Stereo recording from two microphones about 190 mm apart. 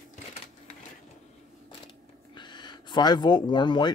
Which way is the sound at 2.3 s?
25° left (ahead or behind).